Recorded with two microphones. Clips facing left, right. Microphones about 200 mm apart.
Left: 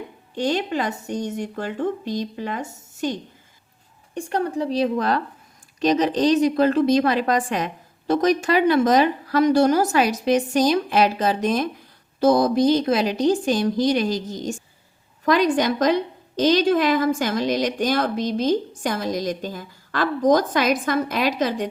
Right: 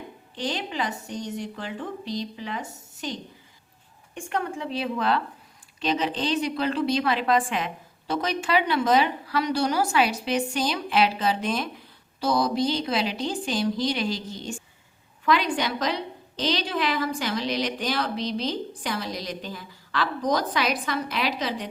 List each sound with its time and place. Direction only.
0.3 s a woman's voice: 50° left (ahead or behind)
4.1 s a woman's voice: 35° left (ahead or behind)